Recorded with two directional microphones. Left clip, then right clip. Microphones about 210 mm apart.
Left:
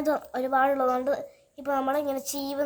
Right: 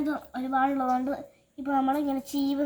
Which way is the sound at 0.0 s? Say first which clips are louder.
Left 5 dB; 65° left (ahead or behind).